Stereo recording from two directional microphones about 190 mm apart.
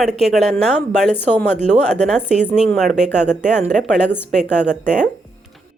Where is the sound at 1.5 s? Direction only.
35° right (ahead or behind).